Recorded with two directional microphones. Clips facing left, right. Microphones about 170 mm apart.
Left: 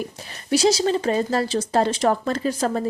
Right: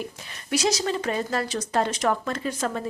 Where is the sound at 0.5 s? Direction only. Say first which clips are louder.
Left 6 dB; 30° left (ahead or behind).